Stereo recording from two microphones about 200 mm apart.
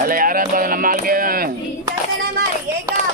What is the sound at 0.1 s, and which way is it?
Speech, 45° right (ahead or behind).